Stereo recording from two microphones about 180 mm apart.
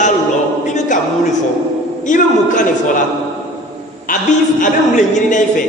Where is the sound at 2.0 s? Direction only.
45° left (ahead or behind).